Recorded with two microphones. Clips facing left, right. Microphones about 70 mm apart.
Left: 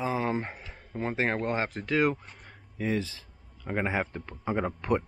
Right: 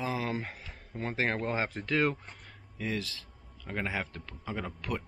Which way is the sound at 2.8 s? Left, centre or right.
Left.